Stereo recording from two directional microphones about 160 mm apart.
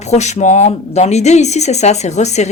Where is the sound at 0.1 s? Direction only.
45° left (ahead or behind).